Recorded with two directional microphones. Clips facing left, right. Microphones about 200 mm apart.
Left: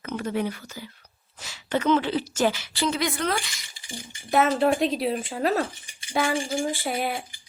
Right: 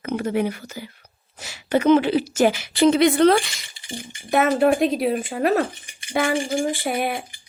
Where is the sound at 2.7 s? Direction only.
60° right (ahead or behind).